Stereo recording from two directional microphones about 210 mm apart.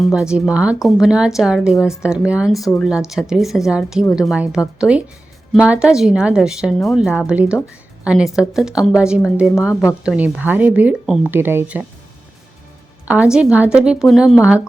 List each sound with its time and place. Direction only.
0.0 s a woman's voice: 5° right (ahead or behind)
13.1 s a woman's voice: 5° right (ahead or behind)